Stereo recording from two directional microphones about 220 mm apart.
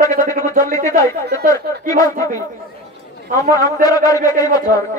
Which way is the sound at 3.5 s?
15° left (ahead or behind).